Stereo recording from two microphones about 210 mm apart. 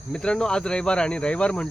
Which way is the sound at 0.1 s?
5° left (ahead or behind).